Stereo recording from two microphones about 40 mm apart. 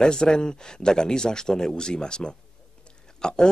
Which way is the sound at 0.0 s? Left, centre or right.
Centre.